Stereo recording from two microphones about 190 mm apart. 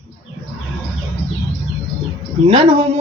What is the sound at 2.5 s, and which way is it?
Speech, 25° right (ahead or behind).